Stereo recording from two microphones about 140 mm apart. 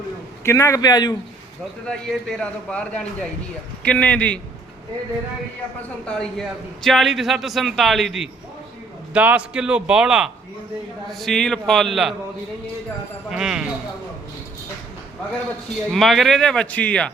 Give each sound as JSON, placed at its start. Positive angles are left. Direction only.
{"t": 0.4, "sound": "a man's voice", "side_deg": 20}
{"t": 1.9, "sound": "a man's voice", "side_deg": 5}
{"t": 6.1, "sound": "a man's voice", "side_deg": 5}
{"t": 13.3, "sound": "a man's voice", "side_deg": -5}
{"t": 15.9, "sound": "a man's voice", "side_deg": 0}